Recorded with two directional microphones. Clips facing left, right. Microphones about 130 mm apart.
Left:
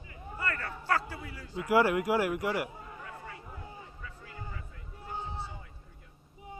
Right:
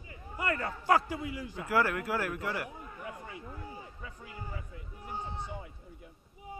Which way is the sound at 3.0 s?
20° right (ahead or behind).